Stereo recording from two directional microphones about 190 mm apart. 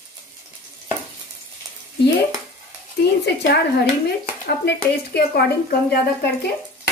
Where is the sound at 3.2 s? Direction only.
60° left (ahead or behind).